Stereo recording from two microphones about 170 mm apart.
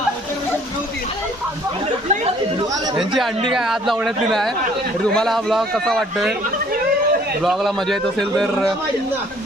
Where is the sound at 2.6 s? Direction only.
20° right (ahead or behind).